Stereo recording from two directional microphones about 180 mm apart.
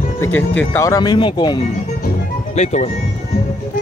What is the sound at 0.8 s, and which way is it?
Speech, 20° left (ahead or behind).